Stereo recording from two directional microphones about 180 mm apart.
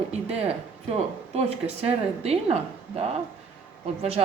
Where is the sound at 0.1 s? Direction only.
35° right (ahead or behind).